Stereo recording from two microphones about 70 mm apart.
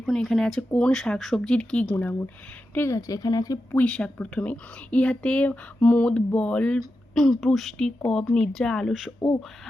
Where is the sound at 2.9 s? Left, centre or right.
Left.